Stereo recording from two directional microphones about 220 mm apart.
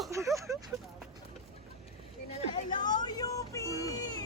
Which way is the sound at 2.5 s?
20° left (ahead or behind).